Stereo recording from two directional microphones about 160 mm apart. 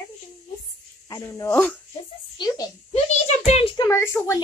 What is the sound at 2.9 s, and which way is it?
Speech, 40° left (ahead or behind).